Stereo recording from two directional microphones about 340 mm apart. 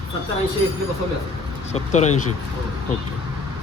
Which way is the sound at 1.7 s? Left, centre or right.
Centre.